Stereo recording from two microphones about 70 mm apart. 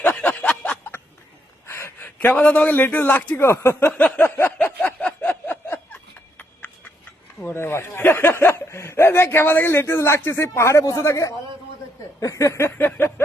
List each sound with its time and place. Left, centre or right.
0.0 s a sound: left
1.6 s a sound: left
2.1 s a man's voice: centre
3.4 s speech: left
3.9 s a man's voice: centre
4.2 s speech: left
4.5 s a sound: left
7.4 s speech: left
12.7 s a man's voice: left